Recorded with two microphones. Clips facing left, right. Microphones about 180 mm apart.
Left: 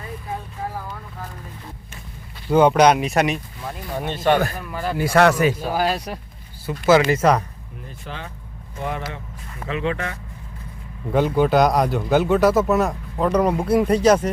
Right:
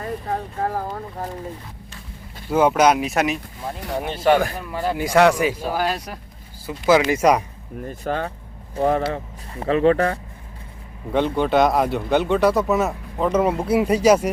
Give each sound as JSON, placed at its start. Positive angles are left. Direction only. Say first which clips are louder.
{"t": 0.0, "sound": "vehicle", "louder": "right 5 dB", "side_deg": -55}
{"t": 2.5, "sound": "speech", "louder": "left 2 dB", "side_deg": -5}
{"t": 4.7, "sound": "speech", "louder": "right 2 dB", "side_deg": -25}
{"t": 4.9, "sound": "speech", "louder": "even", "side_deg": -15}
{"t": 5.7, "sound": "speech", "louder": "left 2 dB", "side_deg": 5}
{"t": 6.7, "sound": "speech", "louder": "left 1 dB", "side_deg": -10}
{"t": 7.9, "sound": "speech", "louder": "right 10 dB", "side_deg": -50}
{"t": 8.7, "sound": "speech", "louder": "right 9 dB", "side_deg": -35}
{"t": 11.1, "sound": "speech", "louder": "left 1 dB", "side_deg": 5}